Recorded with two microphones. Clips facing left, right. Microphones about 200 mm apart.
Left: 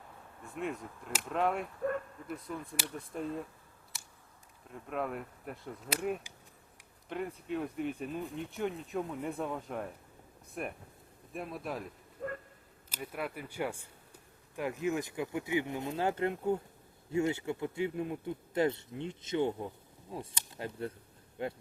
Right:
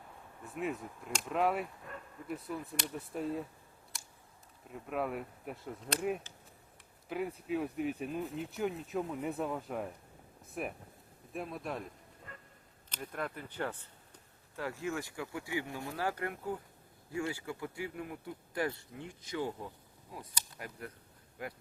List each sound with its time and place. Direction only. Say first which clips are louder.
0.5 s speech: even; 5° right (ahead or behind)
3.9 s camera: even; centre (ahead or behind)
4.7 s speech: even; 5° right (ahead or behind)
12.2 s dog: left 15 dB; 75° left (ahead or behind)
12.9 s speech: left 1 dB; 5° left (ahead or behind); by 21.5 s 25° left (ahead or behind)